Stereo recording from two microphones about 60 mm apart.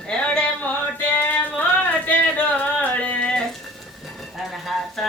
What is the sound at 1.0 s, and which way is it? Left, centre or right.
Music, left.